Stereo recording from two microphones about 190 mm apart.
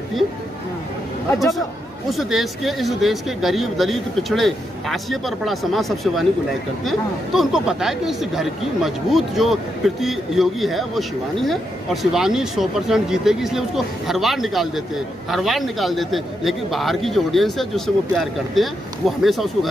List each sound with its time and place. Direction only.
2.0 s speech: centre (ahead or behind)